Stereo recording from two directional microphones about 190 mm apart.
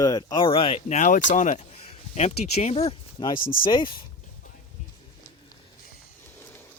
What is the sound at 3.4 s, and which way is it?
Speech, 50° left (ahead or behind).